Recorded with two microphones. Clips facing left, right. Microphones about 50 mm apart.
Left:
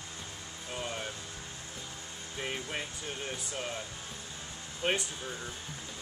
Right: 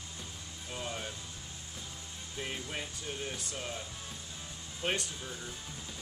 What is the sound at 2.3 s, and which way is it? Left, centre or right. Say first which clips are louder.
Speech: left 2 dB; centre.